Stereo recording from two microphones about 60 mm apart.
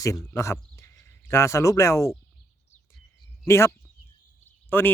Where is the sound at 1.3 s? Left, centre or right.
Left.